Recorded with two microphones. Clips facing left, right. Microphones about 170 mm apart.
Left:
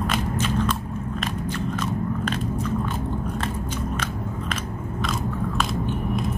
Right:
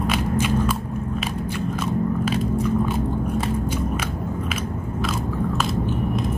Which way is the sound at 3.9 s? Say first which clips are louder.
Right 3 dB; 10° right (ahead or behind).